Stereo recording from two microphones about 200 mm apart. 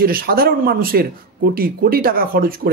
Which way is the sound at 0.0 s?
50° right (ahead or behind).